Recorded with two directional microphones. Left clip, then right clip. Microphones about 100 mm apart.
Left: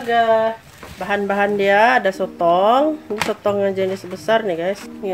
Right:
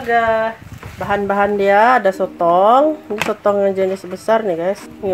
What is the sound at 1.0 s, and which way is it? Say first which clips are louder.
Speech: right 3 dB; 10° right (ahead or behind).